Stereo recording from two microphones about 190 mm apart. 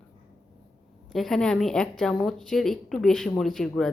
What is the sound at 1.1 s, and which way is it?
Speech, centre (ahead or behind).